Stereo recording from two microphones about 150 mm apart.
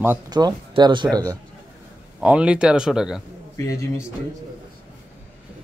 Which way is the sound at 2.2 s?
5° right (ahead or behind).